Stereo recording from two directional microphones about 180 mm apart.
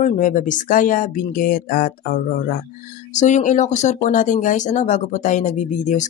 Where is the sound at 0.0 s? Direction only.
45° left (ahead or behind).